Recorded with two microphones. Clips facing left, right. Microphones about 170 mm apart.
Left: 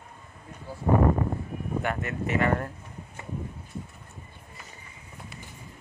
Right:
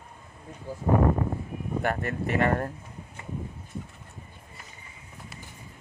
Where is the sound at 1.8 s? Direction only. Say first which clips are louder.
Right 3 dB; 40° right (ahead or behind).